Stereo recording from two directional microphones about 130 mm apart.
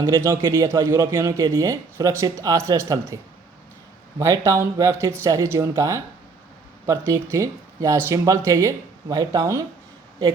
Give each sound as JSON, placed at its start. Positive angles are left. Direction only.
{"t": 0.0, "sound": "speech", "side_deg": -20}
{"t": 4.2, "sound": "speech", "side_deg": -25}